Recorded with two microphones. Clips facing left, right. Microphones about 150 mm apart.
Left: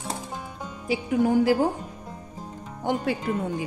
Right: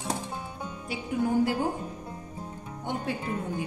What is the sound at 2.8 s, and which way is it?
Speech, 90° left.